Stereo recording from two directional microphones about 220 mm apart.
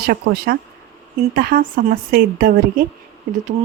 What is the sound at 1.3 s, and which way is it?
Speech, 40° right (ahead or behind).